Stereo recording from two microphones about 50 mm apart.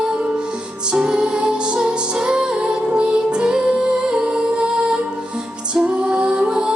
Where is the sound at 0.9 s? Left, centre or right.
Centre.